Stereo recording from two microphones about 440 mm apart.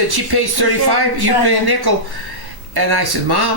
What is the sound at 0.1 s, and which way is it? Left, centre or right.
Speech, right.